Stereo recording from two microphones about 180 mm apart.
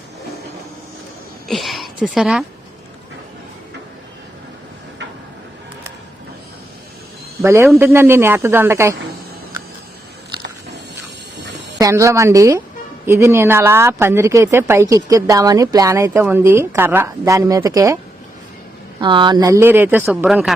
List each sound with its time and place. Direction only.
1.5 s a sound: centre (ahead or behind)
7.4 s speech: 15° right (ahead or behind)
11.8 s speech: 15° right (ahead or behind)